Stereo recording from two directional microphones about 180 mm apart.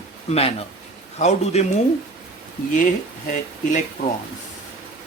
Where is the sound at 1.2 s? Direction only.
40° left (ahead or behind).